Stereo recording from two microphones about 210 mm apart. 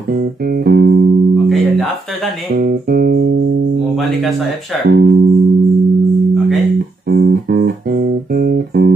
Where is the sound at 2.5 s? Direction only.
40° right (ahead or behind).